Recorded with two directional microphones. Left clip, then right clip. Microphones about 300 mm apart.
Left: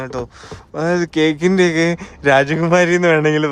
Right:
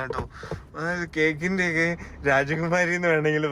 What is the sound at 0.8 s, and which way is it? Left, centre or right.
Speech, left.